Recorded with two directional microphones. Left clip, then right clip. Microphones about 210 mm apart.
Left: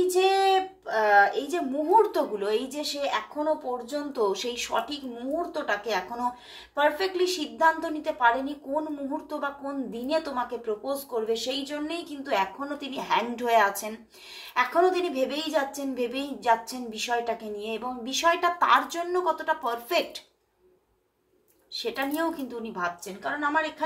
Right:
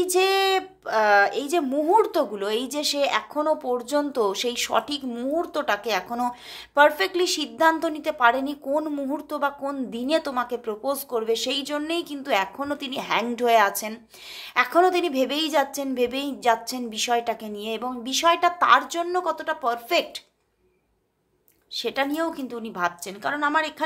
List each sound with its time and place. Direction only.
0.8 s a woman's voice: 45° right (ahead or behind)
21.7 s speech: 40° right (ahead or behind)